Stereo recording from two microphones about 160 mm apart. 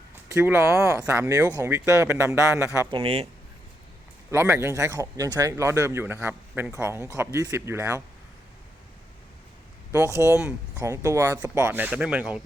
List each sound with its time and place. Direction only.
0.3 s speech: 15° right (ahead or behind)
2.9 s speech: 40° right (ahead or behind)
4.3 s speech: 15° right (ahead or behind)
10.2 s speech: 15° right (ahead or behind)